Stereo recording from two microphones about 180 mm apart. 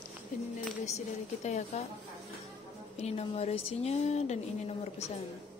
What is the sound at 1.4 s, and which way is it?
Speech, 40° left (ahead or behind).